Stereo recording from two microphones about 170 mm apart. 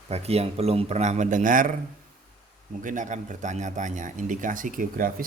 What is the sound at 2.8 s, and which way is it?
A man's voice, 50° right (ahead or behind).